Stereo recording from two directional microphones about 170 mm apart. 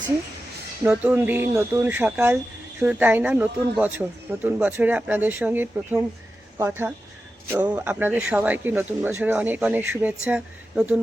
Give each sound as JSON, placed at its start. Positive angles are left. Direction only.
{"t": 0.9, "sound": "speech", "side_deg": -10}